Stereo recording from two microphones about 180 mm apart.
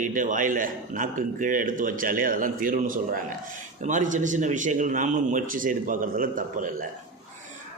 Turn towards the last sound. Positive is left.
turn(degrees=-45)  # may be behind; listen again after turning